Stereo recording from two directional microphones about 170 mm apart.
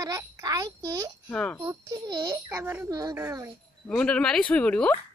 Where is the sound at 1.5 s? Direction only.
20° right (ahead or behind).